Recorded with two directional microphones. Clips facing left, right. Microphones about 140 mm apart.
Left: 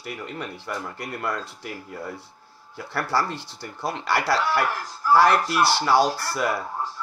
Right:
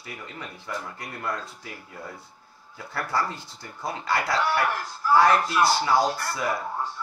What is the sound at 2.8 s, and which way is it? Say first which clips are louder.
Speech: left 3 dB; 80° left.